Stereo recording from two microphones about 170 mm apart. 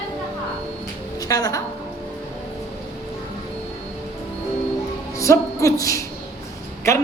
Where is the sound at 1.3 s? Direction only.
20° left (ahead or behind).